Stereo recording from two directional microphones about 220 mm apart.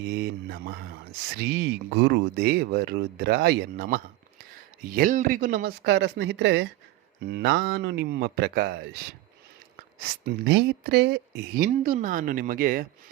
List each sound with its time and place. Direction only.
0.0 s speech: 45° right (ahead or behind)
10.0 s speech: 50° right (ahead or behind)